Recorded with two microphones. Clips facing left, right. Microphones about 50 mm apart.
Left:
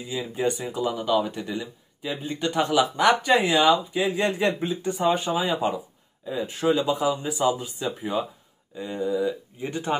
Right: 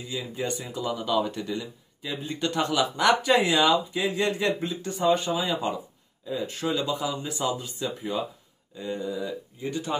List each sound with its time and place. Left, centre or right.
0.3 s speech: centre
4.3 s speech: left
8.7 s speech: centre
9.6 s speech: left